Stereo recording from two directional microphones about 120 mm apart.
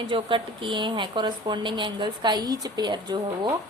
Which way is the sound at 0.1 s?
45° right (ahead or behind).